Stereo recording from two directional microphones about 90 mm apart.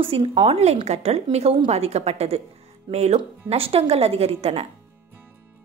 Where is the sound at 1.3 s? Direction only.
60° right (ahead or behind).